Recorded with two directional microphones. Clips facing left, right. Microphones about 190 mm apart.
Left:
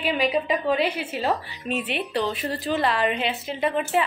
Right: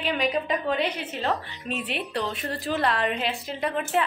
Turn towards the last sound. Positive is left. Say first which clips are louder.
# left 3 dB
turn(degrees=0)  # may be behind; listen again after turning